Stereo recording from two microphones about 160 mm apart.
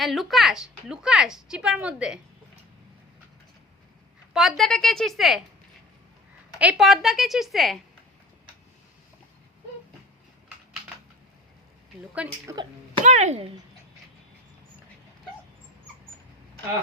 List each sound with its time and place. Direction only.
0.0 s speech: centre (ahead or behind)
4.4 s speech: centre (ahead or behind)
6.6 s speech: 5° right (ahead or behind)
12.2 s a woman's voice: 5° right (ahead or behind)
13.0 s a child's voice: 45° right (ahead or behind)